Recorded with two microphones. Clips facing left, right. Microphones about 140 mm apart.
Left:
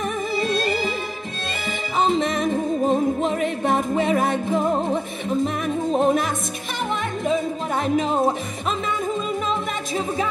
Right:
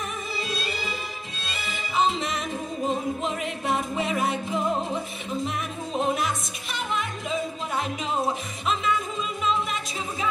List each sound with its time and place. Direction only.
0.4 s music: 50° left (ahead or behind)
2.0 s music: 50° left (ahead or behind)
5.9 s music: 45° left (ahead or behind)
7.2 s speech: 45° left (ahead or behind)